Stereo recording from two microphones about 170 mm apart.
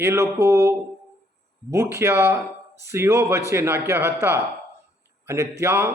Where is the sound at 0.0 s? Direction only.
15° right (ahead or behind).